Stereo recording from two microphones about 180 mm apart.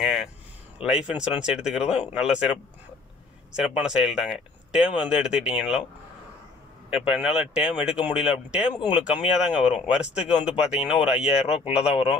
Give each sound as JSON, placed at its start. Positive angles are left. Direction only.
{"t": 0.7, "sound": "speech", "side_deg": -5}
{"t": 6.9, "sound": "speech", "side_deg": -5}